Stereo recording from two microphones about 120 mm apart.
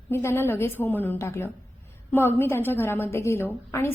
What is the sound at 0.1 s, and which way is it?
A woman's voice, 20° left (ahead or behind).